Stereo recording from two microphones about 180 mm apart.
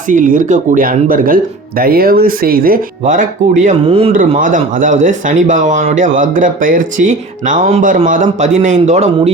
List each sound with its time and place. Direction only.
0.1 s speech: 45° right (ahead or behind)